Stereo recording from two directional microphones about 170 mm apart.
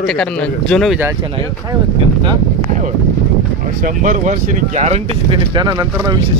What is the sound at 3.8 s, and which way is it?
Speech, 50° right (ahead or behind).